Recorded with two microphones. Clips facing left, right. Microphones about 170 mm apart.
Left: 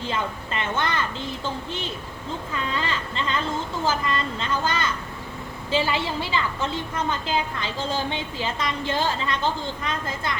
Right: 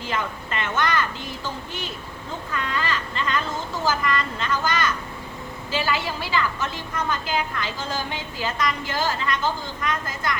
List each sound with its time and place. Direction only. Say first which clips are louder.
0.1 s a woman's voice: right 2 dB; 25° left (ahead or behind)
2.5 s a woman's voice: right 1 dB; 25° left (ahead or behind)